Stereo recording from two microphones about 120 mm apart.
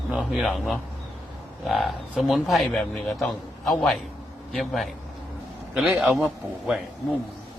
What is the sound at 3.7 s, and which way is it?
Speech, centre (ahead or behind).